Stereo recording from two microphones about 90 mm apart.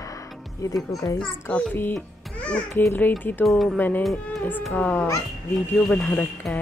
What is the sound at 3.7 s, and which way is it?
Speech, 20° left (ahead or behind).